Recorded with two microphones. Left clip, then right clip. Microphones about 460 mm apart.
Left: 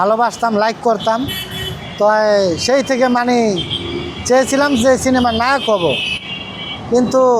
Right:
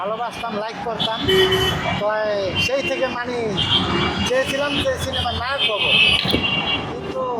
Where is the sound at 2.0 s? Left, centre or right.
Left.